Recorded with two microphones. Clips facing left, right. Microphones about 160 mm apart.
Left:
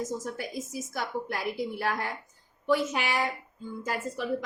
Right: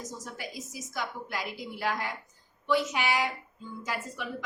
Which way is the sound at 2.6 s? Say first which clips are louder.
Left 1 dB; 45° left (ahead or behind).